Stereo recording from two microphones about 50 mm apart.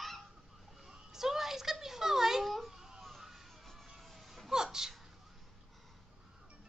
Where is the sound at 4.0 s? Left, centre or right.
Centre.